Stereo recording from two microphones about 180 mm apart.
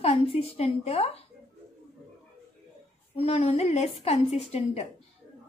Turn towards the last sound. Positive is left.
turn(degrees=35)  # may be behind; listen again after turning